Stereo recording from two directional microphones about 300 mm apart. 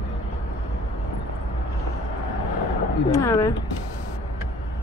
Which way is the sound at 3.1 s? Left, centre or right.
Centre.